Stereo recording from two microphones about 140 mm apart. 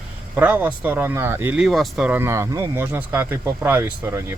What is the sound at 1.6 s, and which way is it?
Speech, centre (ahead or behind).